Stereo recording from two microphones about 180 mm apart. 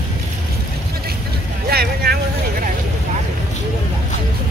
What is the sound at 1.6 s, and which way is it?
Vehicle, 60° right (ahead or behind).